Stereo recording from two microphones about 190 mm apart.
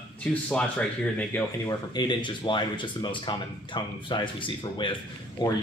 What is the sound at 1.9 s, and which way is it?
Speech, 25° left (ahead or behind).